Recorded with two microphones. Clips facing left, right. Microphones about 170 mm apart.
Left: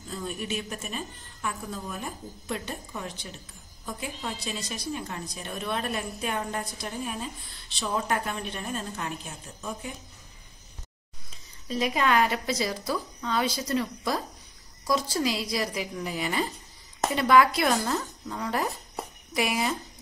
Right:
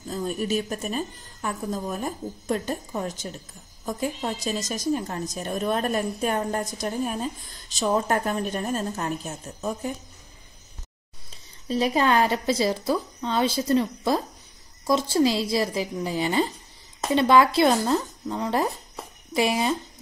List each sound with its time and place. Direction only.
0.1 s a woman's voice: 40° right (ahead or behind)
11.6 s a woman's voice: 30° right (ahead or behind)